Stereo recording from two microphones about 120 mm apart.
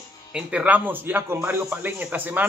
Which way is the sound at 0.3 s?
10° right (ahead or behind).